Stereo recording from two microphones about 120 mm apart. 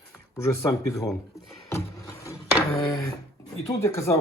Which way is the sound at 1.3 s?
25° left (ahead or behind).